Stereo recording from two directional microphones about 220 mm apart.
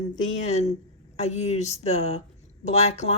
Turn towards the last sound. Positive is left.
turn(degrees=30)  # may be behind; listen again after turning